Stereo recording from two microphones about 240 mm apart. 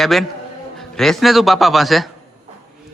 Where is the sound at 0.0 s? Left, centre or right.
Centre.